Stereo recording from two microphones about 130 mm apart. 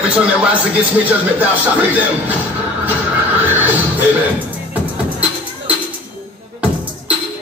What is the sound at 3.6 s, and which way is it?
Music, 15° right (ahead or behind).